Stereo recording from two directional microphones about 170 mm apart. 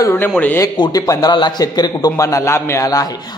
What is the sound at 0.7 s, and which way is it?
A man's voice, 25° left (ahead or behind).